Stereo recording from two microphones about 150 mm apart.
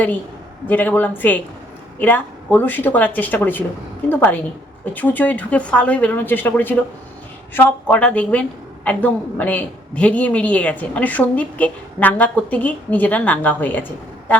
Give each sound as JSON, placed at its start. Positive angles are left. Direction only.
{"t": 0.7, "sound": "a woman's voice", "side_deg": 10}